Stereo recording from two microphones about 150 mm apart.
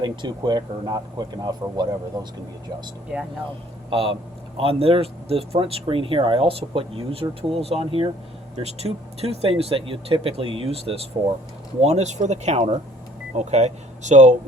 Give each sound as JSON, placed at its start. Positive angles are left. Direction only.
{"t": 0.0, "sound": "speech", "side_deg": -30}
{"t": 3.1, "sound": "speech", "side_deg": -10}
{"t": 3.8, "sound": "speech", "side_deg": -35}